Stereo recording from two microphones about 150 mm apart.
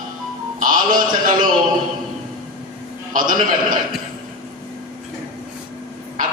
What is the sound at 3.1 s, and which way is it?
Speech, 65° right (ahead or behind).